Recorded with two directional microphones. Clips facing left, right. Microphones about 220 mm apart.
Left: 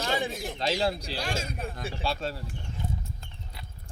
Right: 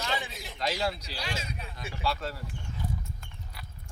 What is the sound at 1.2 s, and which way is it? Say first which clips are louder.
Speech: left 4 dB; 50° left (ahead or behind).